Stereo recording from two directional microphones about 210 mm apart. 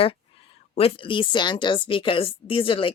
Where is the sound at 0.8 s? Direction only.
25° left (ahead or behind).